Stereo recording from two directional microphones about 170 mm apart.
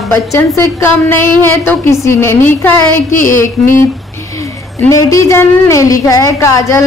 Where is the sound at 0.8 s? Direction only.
15° left (ahead or behind).